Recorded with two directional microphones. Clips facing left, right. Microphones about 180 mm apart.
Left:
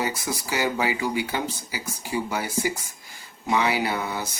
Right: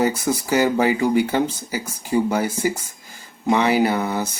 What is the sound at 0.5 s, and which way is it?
Speech, 50° right (ahead or behind).